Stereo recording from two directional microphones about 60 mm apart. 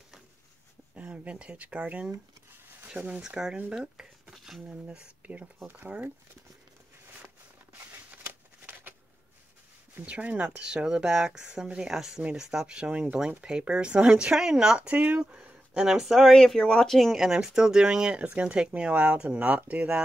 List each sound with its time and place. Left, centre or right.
0.9 s speech: right
2.9 s speech: centre
3.9 s a sound: centre
4.6 s speech: right
8.1 s a sound: right
10.0 s speech: right